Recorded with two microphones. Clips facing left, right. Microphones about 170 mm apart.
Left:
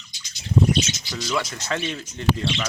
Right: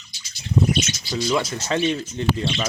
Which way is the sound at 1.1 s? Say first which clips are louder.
Right 5 dB; 20° right (ahead or behind).